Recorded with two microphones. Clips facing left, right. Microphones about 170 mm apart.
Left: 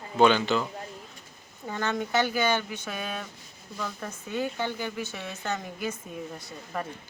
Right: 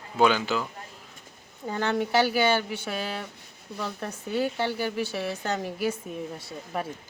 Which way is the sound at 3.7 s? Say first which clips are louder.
Right 2 dB; 60° right (ahead or behind).